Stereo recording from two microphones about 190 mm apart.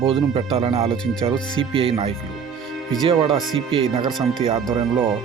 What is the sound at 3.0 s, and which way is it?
Speech, 30° right (ahead or behind).